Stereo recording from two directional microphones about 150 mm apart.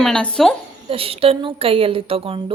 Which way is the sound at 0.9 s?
40° right (ahead or behind).